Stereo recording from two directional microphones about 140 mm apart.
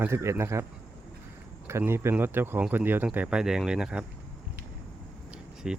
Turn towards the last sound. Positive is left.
turn(degrees=-5)  # may be behind; listen again after turning